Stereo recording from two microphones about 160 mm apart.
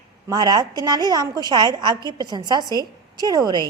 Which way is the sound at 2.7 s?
20° left (ahead or behind).